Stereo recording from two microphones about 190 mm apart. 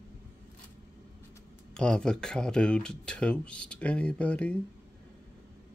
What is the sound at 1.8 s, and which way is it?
Speech, 5° left (ahead or behind).